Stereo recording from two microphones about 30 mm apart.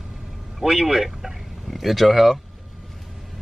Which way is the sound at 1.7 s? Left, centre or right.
Centre.